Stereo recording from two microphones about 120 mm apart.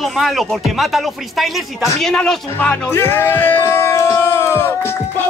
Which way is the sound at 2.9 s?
20° left (ahead or behind).